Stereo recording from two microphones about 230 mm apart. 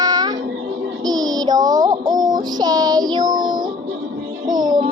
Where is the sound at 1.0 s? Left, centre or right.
Centre.